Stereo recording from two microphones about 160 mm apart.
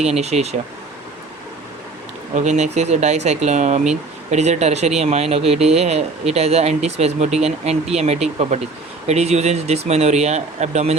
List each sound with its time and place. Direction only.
0.0 s speech: 40° right (ahead or behind)
2.3 s speech: 45° right (ahead or behind)